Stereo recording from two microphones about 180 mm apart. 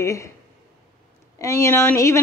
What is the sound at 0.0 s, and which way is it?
Speech, 15° left (ahead or behind).